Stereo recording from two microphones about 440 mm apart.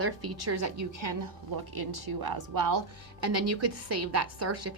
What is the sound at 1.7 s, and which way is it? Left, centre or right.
A woman's voice, right.